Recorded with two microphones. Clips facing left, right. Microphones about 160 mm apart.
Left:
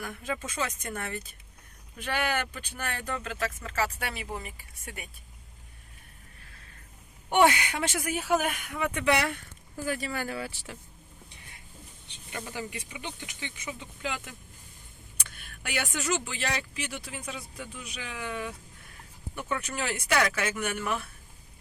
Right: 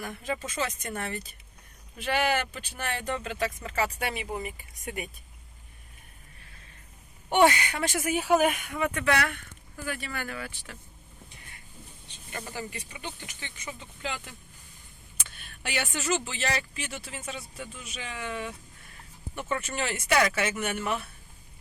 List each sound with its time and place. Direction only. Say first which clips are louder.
0.8 s speech: right 1 dB; 10° right (ahead or behind)
7.3 s speech: right 1 dB; 5° left (ahead or behind)
8.0 s speech: right 6 dB; 10° right (ahead or behind)
8.6 s speech: right 2 dB; centre (ahead or behind)
8.9 s speech: left 2 dB; 15° left (ahead or behind)
9.8 s speech: left 3 dB; 35° left (ahead or behind)
12.3 s speech: even; 10° left (ahead or behind)
15.7 s speech: right 1 dB; centre (ahead or behind)